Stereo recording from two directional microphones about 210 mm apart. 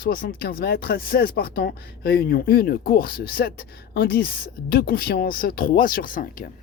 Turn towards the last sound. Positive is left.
turn(degrees=40)  # may be behind; listen again after turning